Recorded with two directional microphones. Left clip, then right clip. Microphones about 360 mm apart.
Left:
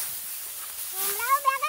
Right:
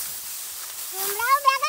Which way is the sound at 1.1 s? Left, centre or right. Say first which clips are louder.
Right 4 dB; right.